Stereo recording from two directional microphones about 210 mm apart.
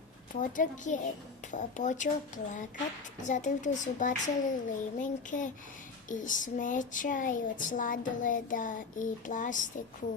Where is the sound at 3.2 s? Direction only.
35° left (ahead or behind).